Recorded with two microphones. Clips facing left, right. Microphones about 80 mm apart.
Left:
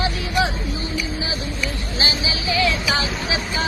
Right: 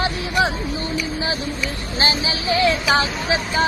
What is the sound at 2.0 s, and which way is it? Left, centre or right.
Speech, right.